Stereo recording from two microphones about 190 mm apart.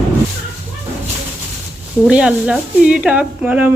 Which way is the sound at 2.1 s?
5° right (ahead or behind).